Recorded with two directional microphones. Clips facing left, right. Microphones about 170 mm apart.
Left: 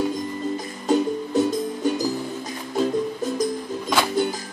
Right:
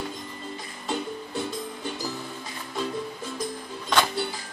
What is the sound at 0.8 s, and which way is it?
Music, 40° left (ahead or behind).